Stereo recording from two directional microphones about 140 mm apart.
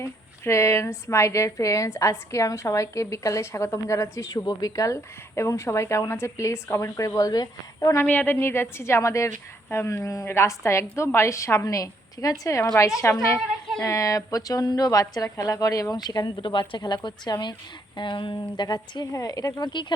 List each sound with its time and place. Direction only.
0.0 s a woman's voice: 20° left (ahead or behind)
8.0 s a woman's voice: 10° left (ahead or behind); by 19.9 s 35° left (ahead or behind)